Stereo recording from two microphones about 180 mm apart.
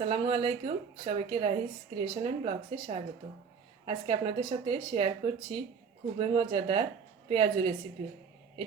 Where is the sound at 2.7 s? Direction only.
25° right (ahead or behind).